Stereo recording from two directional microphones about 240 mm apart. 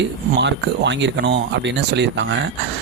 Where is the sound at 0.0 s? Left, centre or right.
Right.